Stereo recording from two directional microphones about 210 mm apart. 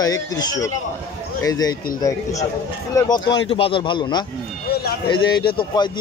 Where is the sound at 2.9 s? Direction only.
15° left (ahead or behind).